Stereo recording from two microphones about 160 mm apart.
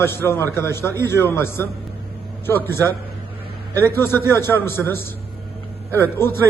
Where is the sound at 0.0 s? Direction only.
15° left (ahead or behind).